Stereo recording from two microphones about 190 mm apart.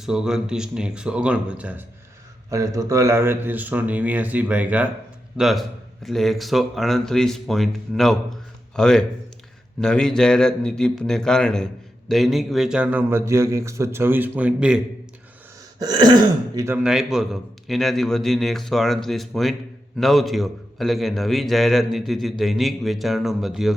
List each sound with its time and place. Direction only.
0.0 s a man's voice: 5° right (ahead or behind)
2.5 s a man's voice: 15° right (ahead or behind)
15.8 s throat clearing: 20° right (ahead or behind)
16.6 s a man's voice: 10° right (ahead or behind)